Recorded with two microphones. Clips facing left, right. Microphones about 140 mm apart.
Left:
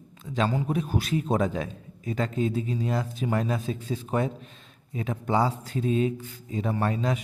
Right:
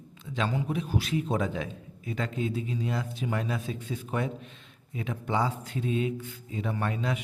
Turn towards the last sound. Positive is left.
turn(degrees=35)  # may be behind; listen again after turning